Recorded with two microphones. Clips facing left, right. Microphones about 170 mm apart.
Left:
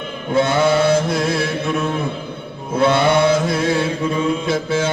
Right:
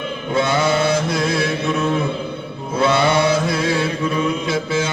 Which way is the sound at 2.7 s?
55° left (ahead or behind).